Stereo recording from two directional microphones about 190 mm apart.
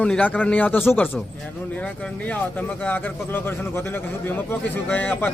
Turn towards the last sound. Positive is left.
turn(degrees=5)  # may be behind; listen again after turning